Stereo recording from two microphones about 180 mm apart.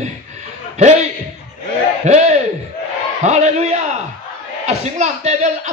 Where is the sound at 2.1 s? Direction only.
40° right (ahead or behind).